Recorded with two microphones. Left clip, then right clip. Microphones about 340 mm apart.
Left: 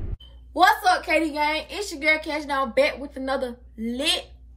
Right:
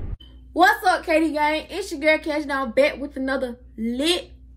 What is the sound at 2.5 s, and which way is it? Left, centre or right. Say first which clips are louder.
Speech: right 1 dB; left.